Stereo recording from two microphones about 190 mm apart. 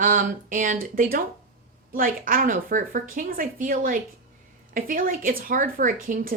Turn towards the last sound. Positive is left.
turn(degrees=-45)  # may be behind; listen again after turning